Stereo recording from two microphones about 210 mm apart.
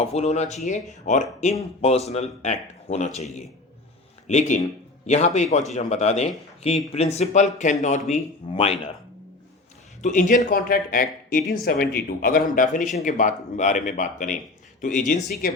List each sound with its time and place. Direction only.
0.0 s speech: 30° left (ahead or behind)
4.3 s speech: 35° left (ahead or behind)
10.0 s speech: 35° left (ahead or behind)